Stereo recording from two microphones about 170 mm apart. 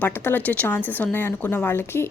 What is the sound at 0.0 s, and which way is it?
A woman's voice, 10° left (ahead or behind).